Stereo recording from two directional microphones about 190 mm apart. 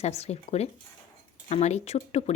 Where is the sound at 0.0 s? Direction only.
35° left (ahead or behind).